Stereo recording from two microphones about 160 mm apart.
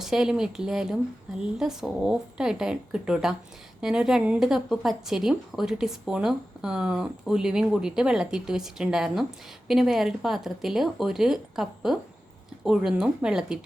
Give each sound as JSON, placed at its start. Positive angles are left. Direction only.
{"t": 0.0, "sound": "a woman's voice", "side_deg": -5}